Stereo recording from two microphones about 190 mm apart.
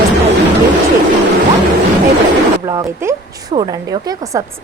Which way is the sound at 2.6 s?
20° right (ahead or behind).